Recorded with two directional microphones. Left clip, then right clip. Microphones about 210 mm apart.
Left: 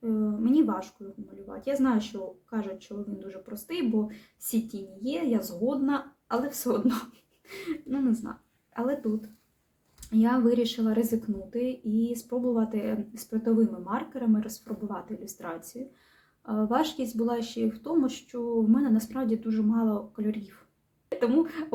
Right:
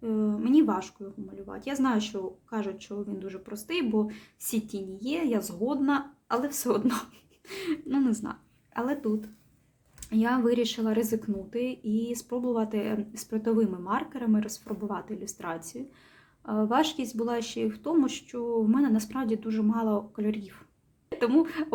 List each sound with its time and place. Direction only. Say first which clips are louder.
0.0 s a sound: even; 35° right (ahead or behind)
1.5 s a woman's voice: left 2 dB; 35° right (ahead or behind)
10.1 s a woman's voice: left 1 dB; 35° right (ahead or behind)